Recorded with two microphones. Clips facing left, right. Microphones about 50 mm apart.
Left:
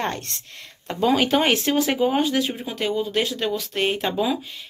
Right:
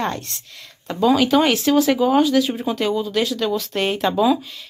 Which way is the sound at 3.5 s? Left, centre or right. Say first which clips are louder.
Right 2 dB; centre.